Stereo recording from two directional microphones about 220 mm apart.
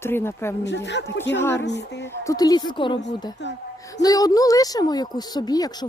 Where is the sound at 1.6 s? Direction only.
50° left (ahead or behind).